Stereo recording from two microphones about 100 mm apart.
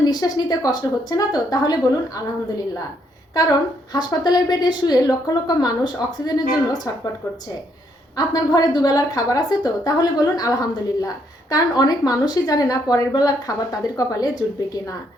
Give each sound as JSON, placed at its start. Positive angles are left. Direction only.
{"t": 0.0, "sound": "a woman's voice", "side_deg": 40}
{"t": 3.9, "sound": "a woman's voice", "side_deg": 45}
{"t": 8.1, "sound": "a woman's voice", "side_deg": 40}